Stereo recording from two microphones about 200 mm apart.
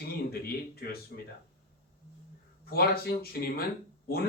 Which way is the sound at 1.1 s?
50° left (ahead or behind).